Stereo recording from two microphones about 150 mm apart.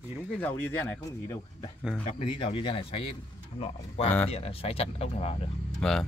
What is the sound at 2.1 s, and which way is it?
Speech, 40° left (ahead or behind).